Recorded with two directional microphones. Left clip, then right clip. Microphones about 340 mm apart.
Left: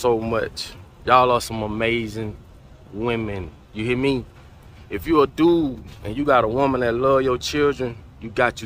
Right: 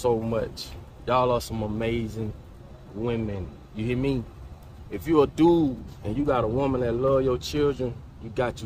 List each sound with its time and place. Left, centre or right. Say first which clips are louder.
0.0 s speech: left 5 dB; centre